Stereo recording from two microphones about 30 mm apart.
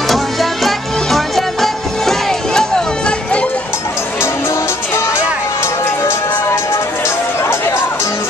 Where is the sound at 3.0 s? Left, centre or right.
Left.